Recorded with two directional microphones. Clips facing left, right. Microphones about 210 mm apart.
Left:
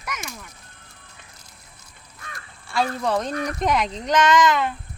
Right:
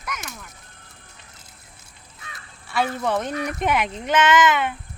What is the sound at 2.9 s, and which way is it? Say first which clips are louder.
Speech: even; 5° right (ahead or behind).